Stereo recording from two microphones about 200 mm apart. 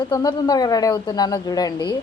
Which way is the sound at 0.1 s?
20° left (ahead or behind).